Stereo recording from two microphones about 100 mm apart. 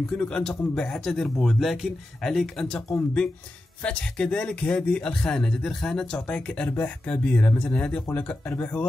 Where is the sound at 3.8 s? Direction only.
10° left (ahead or behind).